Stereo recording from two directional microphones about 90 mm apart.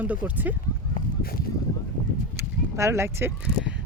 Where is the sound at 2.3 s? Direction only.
30° right (ahead or behind).